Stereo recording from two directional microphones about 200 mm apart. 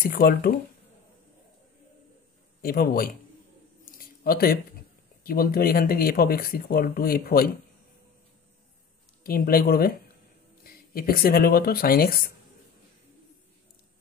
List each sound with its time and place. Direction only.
0.0 s speech: 50° left (ahead or behind)
2.6 s speech: 50° left (ahead or behind)
3.8 s a sound: 45° left (ahead or behind)
5.2 s speech: 50° left (ahead or behind)
9.2 s speech: 50° left (ahead or behind)